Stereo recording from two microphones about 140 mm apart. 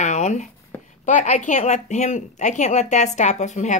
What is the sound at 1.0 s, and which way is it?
Speech, 60° left (ahead or behind).